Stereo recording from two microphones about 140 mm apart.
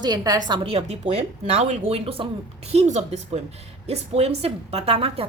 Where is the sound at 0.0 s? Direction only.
30° right (ahead or behind).